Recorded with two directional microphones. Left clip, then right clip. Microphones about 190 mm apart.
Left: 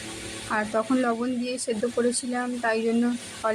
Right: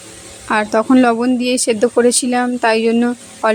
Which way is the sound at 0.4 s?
50° right (ahead or behind).